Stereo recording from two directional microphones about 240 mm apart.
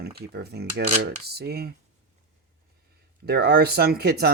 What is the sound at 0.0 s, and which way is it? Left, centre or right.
Speech, right.